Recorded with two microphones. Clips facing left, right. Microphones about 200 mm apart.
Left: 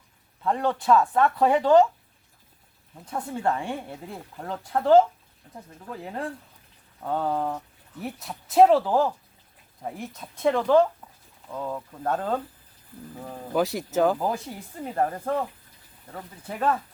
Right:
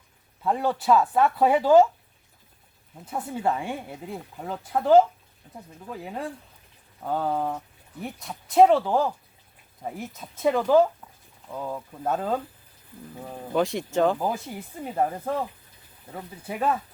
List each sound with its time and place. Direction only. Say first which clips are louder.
0.4 s speech: even; 5° right (ahead or behind)
3.1 s speech: even; 5° right (ahead or behind)